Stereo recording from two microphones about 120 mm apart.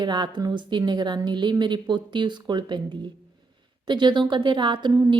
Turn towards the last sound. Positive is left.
turn(degrees=-40)  # may be behind; listen again after turning